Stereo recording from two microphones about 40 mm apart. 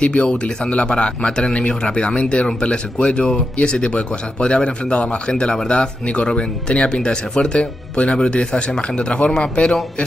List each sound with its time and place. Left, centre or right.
0.0 s a man's voice: left